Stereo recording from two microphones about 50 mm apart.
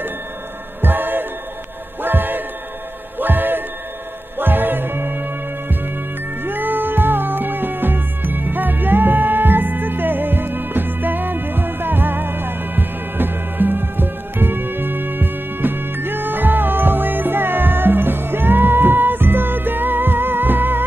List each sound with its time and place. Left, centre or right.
0.7 s music: right